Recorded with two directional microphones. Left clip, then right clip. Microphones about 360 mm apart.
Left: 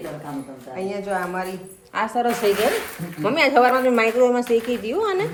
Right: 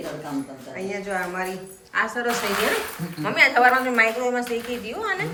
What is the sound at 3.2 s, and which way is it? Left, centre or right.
Speech, centre.